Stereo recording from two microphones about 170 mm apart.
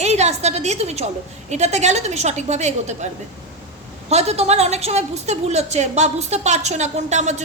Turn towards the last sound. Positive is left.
turn(degrees=-45)  # may be behind; listen again after turning